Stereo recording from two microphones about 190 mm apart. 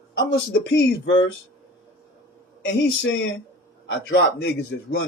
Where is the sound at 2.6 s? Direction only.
70° left (ahead or behind).